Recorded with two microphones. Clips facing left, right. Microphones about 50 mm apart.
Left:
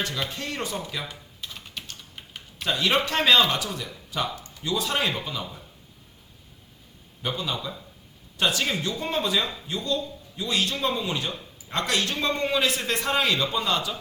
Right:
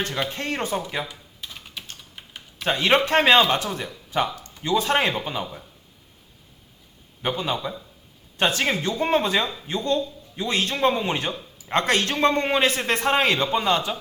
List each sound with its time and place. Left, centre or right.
0.3 s a man's voice: right
1.0 s typing: centre
2.6 s a man's voice: right
7.2 s a man's voice: right